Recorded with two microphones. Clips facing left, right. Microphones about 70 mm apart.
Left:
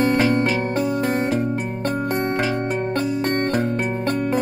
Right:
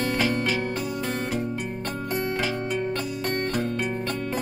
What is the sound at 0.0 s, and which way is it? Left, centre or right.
Music, left.